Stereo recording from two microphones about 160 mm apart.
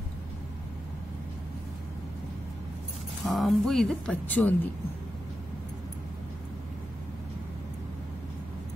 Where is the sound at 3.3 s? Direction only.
Centre (ahead or behind).